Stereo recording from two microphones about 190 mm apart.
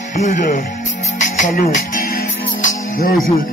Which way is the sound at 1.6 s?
45° left (ahead or behind).